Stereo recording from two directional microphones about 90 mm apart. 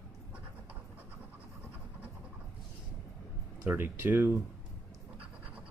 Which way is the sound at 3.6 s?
25° right (ahead or behind).